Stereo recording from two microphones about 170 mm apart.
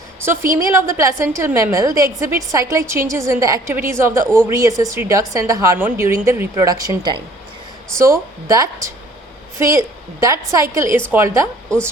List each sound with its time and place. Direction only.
0.5 s a woman's voice: 15° right (ahead or behind)